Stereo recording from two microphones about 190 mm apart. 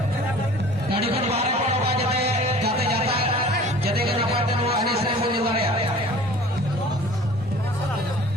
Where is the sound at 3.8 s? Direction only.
55° right (ahead or behind).